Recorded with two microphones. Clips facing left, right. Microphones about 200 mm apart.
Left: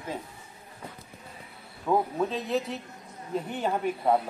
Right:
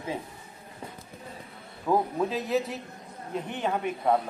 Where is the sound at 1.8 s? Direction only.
Centre (ahead or behind).